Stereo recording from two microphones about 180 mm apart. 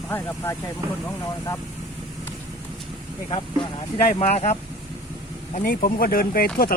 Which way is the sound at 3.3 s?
30° left (ahead or behind).